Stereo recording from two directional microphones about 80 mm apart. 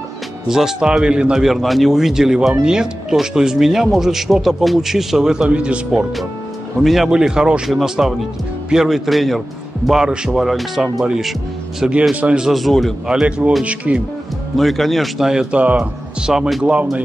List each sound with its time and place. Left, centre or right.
0.5 s speech: centre
12.5 s speech: centre
13.1 s speech: centre
14.6 s speech: centre